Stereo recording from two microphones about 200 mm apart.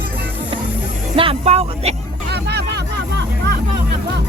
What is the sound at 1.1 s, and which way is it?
Speech, 30° right (ahead or behind).